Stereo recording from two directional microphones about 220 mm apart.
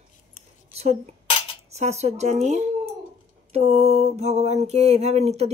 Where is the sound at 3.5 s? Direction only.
30° right (ahead or behind).